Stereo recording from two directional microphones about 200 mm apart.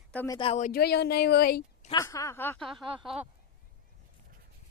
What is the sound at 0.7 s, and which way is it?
Speech, 55° left (ahead or behind).